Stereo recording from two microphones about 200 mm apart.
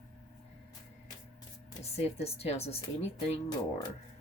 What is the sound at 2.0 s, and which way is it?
Speech, 30° left (ahead or behind).